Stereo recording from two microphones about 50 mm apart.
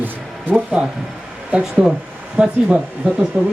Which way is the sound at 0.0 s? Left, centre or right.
Right.